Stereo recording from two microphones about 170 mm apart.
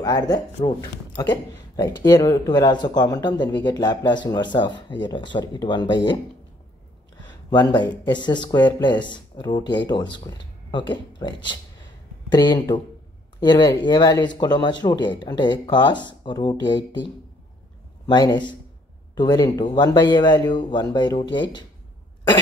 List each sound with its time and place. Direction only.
0.0 s speech: 25° left (ahead or behind)
7.2 s speech: 25° left (ahead or behind)